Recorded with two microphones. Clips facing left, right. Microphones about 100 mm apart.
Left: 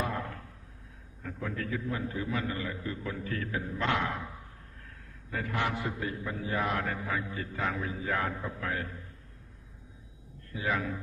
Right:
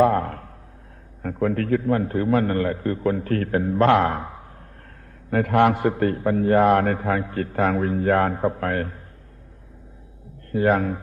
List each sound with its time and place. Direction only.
0.0 s a sound: 55° right (ahead or behind)
1.2 s a man's voice: 55° right (ahead or behind)
10.5 s a man's voice: 55° right (ahead or behind)